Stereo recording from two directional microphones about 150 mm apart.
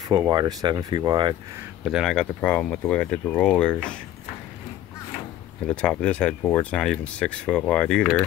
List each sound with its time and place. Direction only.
0.1 s speech: 25° right (ahead or behind)
1.9 s speech: centre (ahead or behind)
5.7 s speech: 5° left (ahead or behind)